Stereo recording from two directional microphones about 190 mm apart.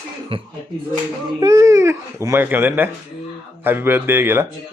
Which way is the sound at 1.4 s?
20° right (ahead or behind).